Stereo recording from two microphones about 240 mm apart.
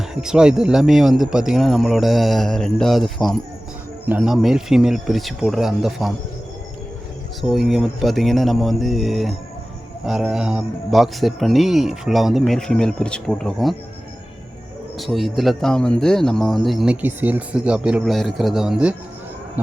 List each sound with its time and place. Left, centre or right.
0.0 s speech: centre
7.4 s speech: centre
14.9 s speech: centre